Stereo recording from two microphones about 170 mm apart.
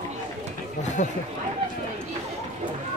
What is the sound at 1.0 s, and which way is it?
Speech, 45° left (ahead or behind).